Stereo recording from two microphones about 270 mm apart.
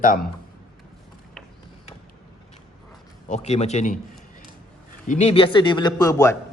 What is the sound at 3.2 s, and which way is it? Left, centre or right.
Speech, left.